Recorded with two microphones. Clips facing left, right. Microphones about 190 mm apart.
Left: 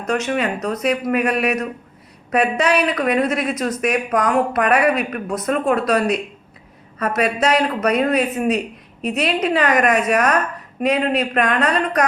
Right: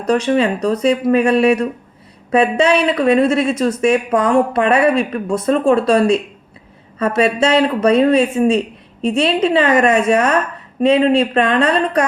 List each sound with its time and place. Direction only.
0.0 s speech: 35° right (ahead or behind)